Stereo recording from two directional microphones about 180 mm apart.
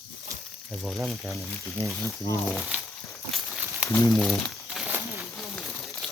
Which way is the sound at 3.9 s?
20° left (ahead or behind).